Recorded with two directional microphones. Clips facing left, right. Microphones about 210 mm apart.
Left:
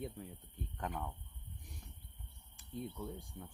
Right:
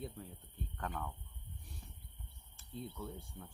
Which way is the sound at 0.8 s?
15° left (ahead or behind).